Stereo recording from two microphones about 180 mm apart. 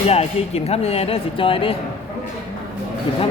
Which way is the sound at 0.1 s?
35° left (ahead or behind).